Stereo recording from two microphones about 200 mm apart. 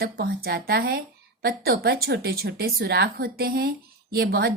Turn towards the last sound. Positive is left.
turn(degrees=-50)  # may be behind; listen again after turning